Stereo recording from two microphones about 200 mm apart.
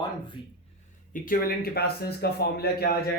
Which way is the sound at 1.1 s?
45° left (ahead or behind).